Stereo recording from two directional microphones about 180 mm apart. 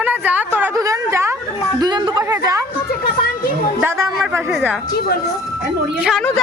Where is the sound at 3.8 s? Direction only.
15° right (ahead or behind).